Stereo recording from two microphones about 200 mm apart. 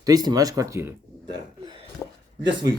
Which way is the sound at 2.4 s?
20° right (ahead or behind).